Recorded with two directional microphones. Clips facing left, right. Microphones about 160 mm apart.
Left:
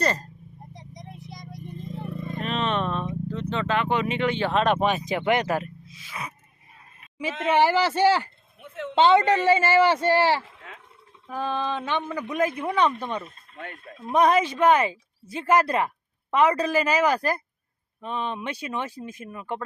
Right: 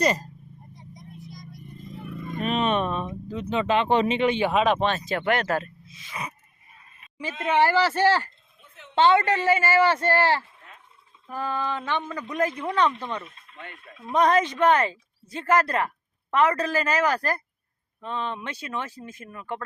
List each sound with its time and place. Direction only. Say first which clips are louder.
0.0 s speech: right 2 dB; 15° right (ahead or behind)
0.7 s vehicle: left 2 dB; 85° left
2.4 s vehicle: right 3 dB; 15° right (ahead or behind)
3.8 s speech: right 3 dB; 30° right (ahead or behind)
4.6 s speech: left 2 dB; centre (ahead or behind)
4.9 s speech: left 2 dB; 15° left (ahead or behind)
7.4 s speech: even; 10° left (ahead or behind)
8.6 s a sound: left 16 dB; 90° left
9.0 s speech: left 2 dB; 20° left (ahead or behind)
10.4 s a sound: left 6 dB; 90° left
11.4 s speech: left 1 dB; 15° left (ahead or behind)
13.2 s speech: left 4 dB; 40° left (ahead or behind)
14.1 s speech: left 1 dB; 10° left (ahead or behind)